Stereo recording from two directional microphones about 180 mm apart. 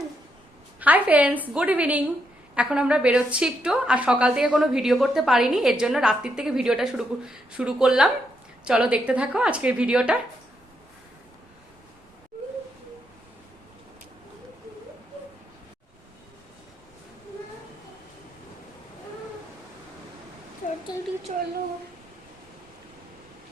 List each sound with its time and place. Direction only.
0.8 s a woman's voice: 10° right (ahead or behind)
20.9 s a woman's voice: 20° left (ahead or behind)
21.3 s speech: 35° right (ahead or behind)